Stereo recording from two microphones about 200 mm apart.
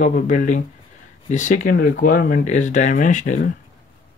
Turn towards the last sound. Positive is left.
turn(degrees=40)  # may be behind; listen again after turning